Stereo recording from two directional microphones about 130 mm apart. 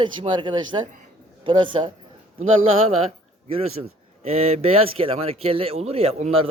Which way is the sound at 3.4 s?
50° right (ahead or behind).